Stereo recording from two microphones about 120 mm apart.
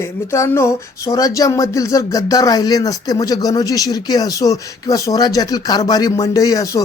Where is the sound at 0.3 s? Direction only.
25° left (ahead or behind).